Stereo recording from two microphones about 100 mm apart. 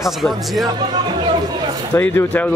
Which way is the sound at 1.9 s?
20° left (ahead or behind).